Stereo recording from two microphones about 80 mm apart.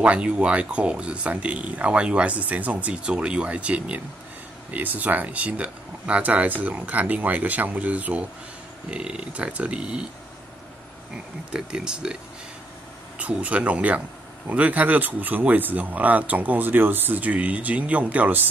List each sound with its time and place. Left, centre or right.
0.0 s speech: centre
11.5 s speech: centre
13.2 s speech: centre